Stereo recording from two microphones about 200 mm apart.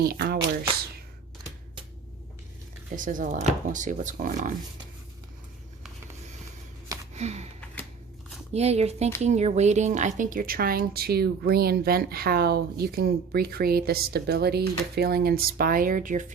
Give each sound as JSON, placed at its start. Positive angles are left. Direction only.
{"t": 0.0, "sound": "a woman's voice", "side_deg": -50}
{"t": 2.9, "sound": "speech", "side_deg": -40}
{"t": 7.1, "sound": "a sound", "side_deg": -35}
{"t": 8.5, "sound": "a woman's voice", "side_deg": -30}